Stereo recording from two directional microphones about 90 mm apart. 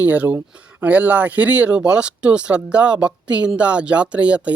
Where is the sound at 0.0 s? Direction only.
15° right (ahead or behind).